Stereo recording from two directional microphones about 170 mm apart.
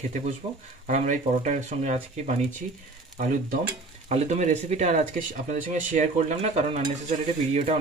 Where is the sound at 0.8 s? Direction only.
45° right (ahead or behind).